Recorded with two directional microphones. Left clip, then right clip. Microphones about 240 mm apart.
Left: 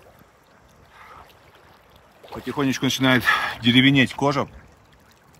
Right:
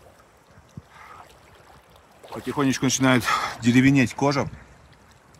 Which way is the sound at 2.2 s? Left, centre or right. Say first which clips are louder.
Even; right.